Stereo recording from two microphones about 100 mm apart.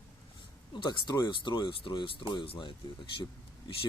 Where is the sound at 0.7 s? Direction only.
50° left (ahead or behind).